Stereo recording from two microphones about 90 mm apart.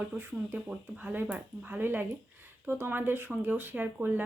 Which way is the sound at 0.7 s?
20° right (ahead or behind).